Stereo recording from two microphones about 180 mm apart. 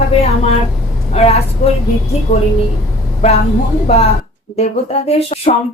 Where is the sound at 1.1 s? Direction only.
35° left (ahead or behind).